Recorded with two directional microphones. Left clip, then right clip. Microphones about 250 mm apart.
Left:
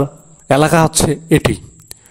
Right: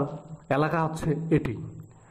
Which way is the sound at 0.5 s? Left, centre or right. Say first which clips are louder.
Left 14 dB; left.